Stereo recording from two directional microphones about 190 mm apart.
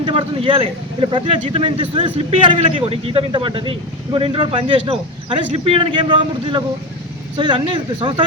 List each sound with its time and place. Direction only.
0.0 s speech: 25° right (ahead or behind)